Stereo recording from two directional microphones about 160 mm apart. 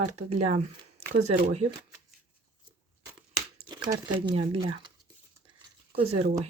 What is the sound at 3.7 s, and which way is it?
Speech, 30° right (ahead or behind).